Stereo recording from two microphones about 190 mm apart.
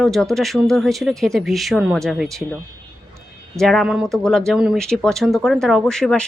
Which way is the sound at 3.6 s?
Centre (ahead or behind).